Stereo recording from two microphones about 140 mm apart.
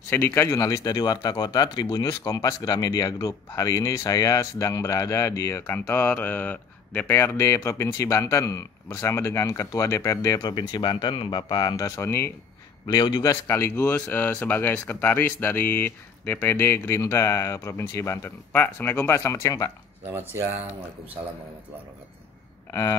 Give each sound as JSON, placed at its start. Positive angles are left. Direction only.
{"t": 0.1, "sound": "speech", "side_deg": 15}
{"t": 12.8, "sound": "a man's voice", "side_deg": 30}
{"t": 13.3, "sound": "speech", "side_deg": 15}
{"t": 22.7, "sound": "speech", "side_deg": 25}